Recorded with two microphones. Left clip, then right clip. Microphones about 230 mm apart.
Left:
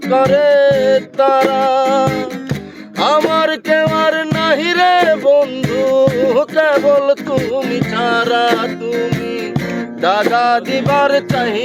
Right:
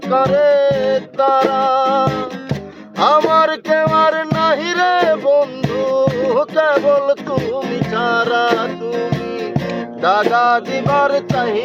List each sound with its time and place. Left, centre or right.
0.1 s music: left
7.3 s music: left
7.9 s music: left
10.0 s music: left